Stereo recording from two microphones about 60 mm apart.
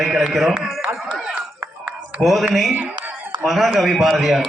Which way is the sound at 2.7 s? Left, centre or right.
Right.